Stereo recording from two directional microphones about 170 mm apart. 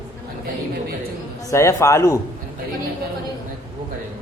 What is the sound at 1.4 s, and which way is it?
Speech, 15° left (ahead or behind).